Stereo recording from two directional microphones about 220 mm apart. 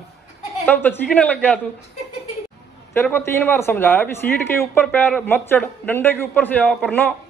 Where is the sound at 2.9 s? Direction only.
10° left (ahead or behind).